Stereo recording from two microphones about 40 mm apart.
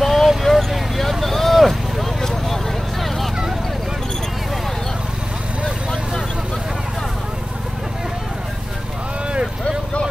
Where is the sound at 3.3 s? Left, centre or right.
Centre.